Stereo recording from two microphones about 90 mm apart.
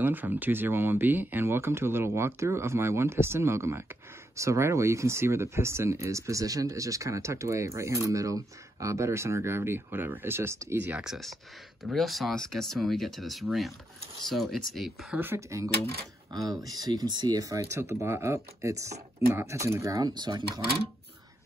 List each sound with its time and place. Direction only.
0.0 s speech: 20° right (ahead or behind)
11.8 s speech: centre (ahead or behind)
15.1 s speech: 25° right (ahead or behind)
16.3 s speech: 40° right (ahead or behind)